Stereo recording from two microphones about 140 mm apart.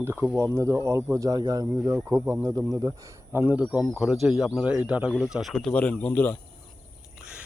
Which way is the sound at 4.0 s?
5° right (ahead or behind).